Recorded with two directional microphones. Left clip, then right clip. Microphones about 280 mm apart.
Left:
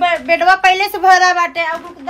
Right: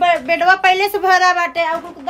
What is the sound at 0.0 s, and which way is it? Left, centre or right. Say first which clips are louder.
A woman's voice: left 1 dB; centre.